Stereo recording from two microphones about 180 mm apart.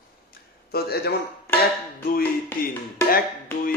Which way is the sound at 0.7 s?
60° left (ahead or behind).